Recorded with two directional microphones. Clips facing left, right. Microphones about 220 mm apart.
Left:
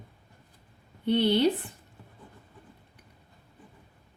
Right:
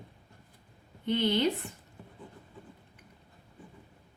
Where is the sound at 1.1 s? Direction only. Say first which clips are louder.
Left 4 dB; 35° left (ahead or behind).